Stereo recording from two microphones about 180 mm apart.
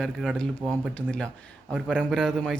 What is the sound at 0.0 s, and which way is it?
A man's voice, 5° left (ahead or behind).